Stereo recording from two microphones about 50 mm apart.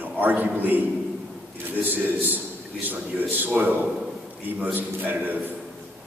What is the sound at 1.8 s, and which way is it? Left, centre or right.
A man's voice, right.